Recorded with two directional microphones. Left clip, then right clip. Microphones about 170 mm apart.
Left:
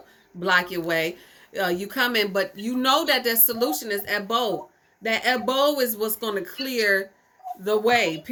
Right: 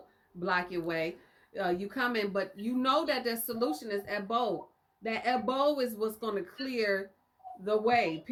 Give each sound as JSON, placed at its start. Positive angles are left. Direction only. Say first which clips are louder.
{"t": 0.3, "sound": "a woman's voice", "louder": "left 10 dB", "side_deg": 25}